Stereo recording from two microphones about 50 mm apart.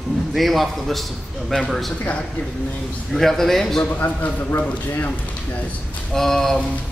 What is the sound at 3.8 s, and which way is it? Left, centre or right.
Speech, left.